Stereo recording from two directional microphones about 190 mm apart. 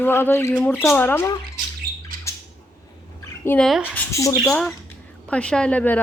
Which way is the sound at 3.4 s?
5° left (ahead or behind).